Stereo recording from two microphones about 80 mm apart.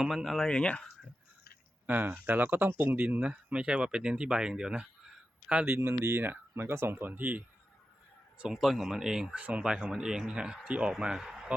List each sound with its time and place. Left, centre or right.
0.0 s speech: centre
0.4 s speech: centre
1.9 s speech: right
5.6 s speech: right
8.4 s speech: centre